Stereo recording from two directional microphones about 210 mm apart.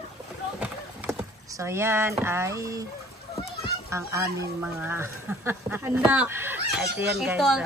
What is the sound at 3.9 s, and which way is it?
Speech, 15° right (ahead or behind).